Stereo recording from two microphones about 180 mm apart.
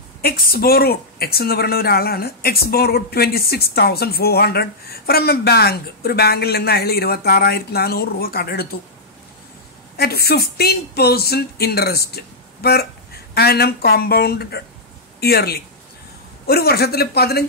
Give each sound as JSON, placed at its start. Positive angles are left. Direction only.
{"t": 0.2, "sound": "speech", "side_deg": 55}
{"t": 9.9, "sound": "speech", "side_deg": 60}